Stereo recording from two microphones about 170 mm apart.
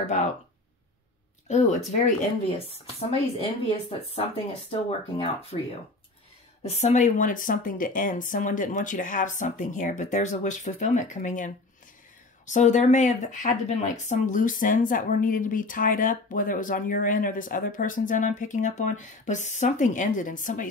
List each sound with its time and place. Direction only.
0.0 s a woman's voice: 45° left (ahead or behind)
1.5 s a woman's voice: 45° left (ahead or behind)
6.6 s a woman's voice: 40° left (ahead or behind)